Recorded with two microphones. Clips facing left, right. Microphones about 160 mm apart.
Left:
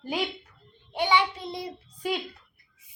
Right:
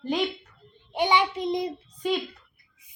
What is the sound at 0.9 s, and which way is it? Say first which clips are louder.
Speech: right 1 dB; 15° right (ahead or behind).